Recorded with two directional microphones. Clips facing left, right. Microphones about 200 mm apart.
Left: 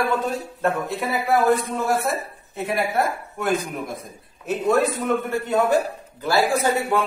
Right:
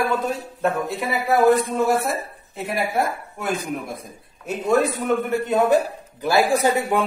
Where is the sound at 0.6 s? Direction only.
Centre (ahead or behind).